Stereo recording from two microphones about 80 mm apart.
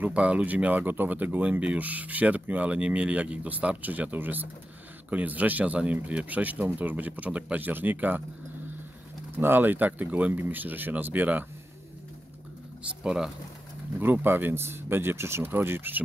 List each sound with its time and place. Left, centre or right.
0.0 s speech: centre
9.4 s speech: right
13.0 s speech: centre
13.9 s speech: right